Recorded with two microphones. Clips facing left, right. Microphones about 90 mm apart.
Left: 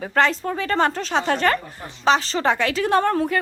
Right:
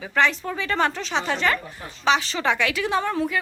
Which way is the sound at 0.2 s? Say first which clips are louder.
Left 2 dB; 40° left (ahead or behind).